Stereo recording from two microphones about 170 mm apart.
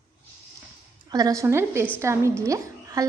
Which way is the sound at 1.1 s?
20° right (ahead or behind).